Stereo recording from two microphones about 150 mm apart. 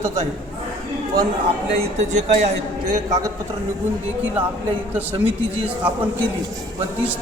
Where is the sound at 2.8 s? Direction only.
25° right (ahead or behind).